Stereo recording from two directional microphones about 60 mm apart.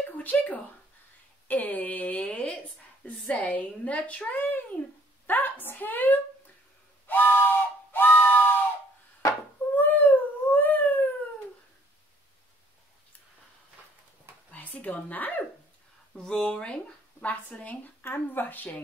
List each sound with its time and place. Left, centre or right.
0.2 s a woman's voice: left
7.1 s a sound: left
9.8 s dog: left
14.5 s speech: left
16.2 s a woman's voice: centre
18.0 s speech: left